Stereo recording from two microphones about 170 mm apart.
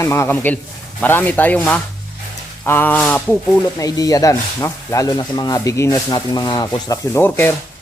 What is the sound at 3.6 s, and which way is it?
Speech, 20° left (ahead or behind).